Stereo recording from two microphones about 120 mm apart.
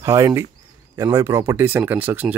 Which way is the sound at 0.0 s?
25° right (ahead or behind).